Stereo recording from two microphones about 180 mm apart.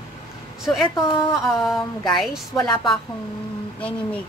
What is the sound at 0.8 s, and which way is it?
Speech, 25° left (ahead or behind).